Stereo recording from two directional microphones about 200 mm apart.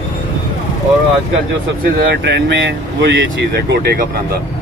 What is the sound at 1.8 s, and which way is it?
Speech, 60° right (ahead or behind).